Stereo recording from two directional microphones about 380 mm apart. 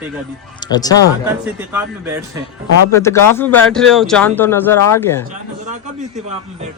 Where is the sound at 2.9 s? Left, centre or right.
Centre.